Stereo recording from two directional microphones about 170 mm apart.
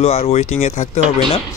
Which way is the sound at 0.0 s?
40° left (ahead or behind).